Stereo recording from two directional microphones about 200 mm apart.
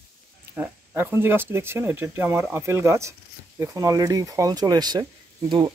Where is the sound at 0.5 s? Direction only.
10° right (ahead or behind).